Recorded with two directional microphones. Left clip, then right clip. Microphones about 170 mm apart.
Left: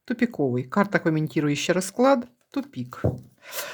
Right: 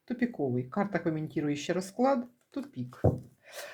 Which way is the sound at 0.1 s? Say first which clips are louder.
Left 7 dB; 45° left (ahead or behind).